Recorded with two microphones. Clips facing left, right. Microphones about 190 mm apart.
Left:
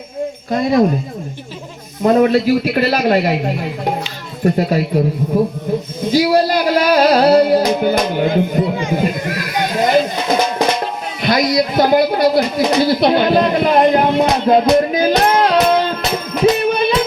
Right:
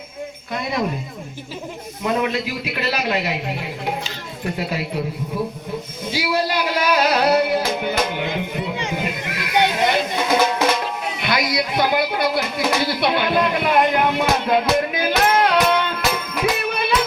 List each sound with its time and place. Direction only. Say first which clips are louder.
0.5 s a man's voice: left 10 dB; 45° left (ahead or behind)
2.0 s a man's voice: left 10 dB; 45° left (ahead or behind)
6.1 s music: left 9 dB; 40° left (ahead or behind)
11.2 s a sound: left 8 dB; 40° left (ahead or behind)
11.5 s speech: left 8 dB; 40° left (ahead or behind)
14.8 s music: left 6 dB; 35° left (ahead or behind)